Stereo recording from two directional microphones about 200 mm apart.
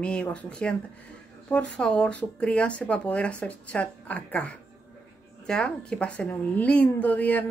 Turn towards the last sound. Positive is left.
turn(degrees=10)  # may be behind; listen again after turning